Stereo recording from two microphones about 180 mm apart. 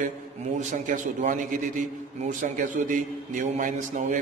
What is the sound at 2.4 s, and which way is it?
A man's voice, 45° right (ahead or behind).